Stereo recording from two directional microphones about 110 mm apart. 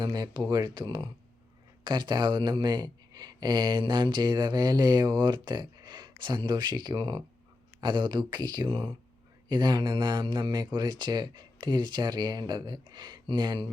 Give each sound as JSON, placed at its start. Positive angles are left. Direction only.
{"t": 0.0, "sound": "speech", "side_deg": -40}